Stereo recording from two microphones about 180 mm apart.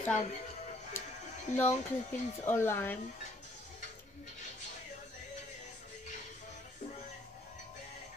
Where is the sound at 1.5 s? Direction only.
40° left (ahead or behind).